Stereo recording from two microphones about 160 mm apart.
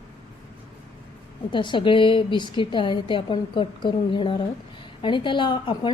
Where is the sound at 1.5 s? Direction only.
30° left (ahead or behind).